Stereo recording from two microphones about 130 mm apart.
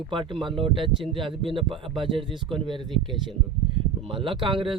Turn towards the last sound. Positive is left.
turn(degrees=-40)  # may be behind; listen again after turning